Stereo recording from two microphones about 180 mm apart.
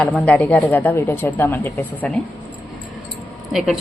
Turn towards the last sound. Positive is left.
turn(degrees=0)  # may be behind; listen again after turning